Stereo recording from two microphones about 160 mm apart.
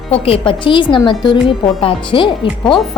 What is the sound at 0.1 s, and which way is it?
A woman's voice, 35° left (ahead or behind).